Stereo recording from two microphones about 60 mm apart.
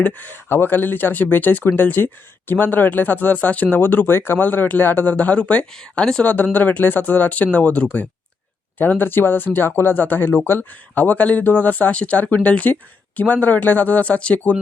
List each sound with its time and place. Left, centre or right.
0.0 s speech: left
6.2 s speech: left